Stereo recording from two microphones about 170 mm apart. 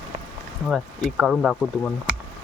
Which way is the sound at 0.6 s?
Centre (ahead or behind).